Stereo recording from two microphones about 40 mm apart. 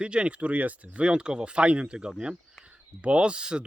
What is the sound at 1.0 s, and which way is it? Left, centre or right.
Speech, right.